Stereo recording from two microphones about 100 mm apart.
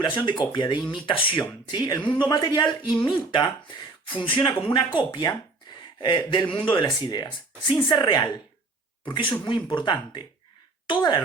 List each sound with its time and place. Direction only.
0.0 s speech: 50° left (ahead or behind)
1.4 s speech: 45° left (ahead or behind)